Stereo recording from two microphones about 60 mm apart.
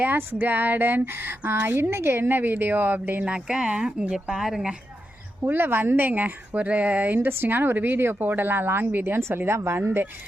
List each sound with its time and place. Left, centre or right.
0.0 s a woman's voice: right
3.2 s speech: centre
5.4 s a woman's voice: right